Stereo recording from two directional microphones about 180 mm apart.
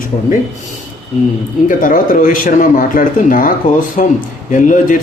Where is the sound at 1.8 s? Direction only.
50° left (ahead or behind).